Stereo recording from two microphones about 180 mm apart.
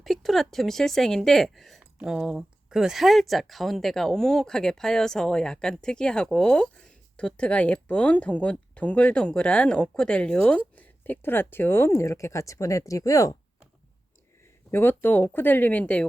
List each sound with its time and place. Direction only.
0.0 s a woman's voice: centre (ahead or behind); by 13.3 s 20° left (ahead or behind)
14.7 s speech: 10° left (ahead or behind)